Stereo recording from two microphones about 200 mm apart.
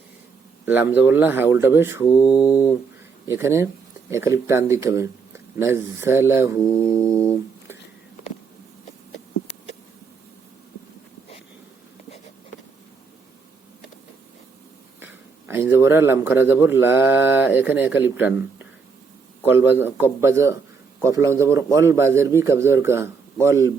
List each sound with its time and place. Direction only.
0.6 s a man's voice: 10° right (ahead or behind)
2.0 s music: 20° left (ahead or behind)
3.2 s a man's voice: 15° right (ahead or behind)
6.6 s music: 10° left (ahead or behind)
15.0 s a man's voice: 10° right (ahead or behind)
19.5 s a man's voice: 10° right (ahead or behind)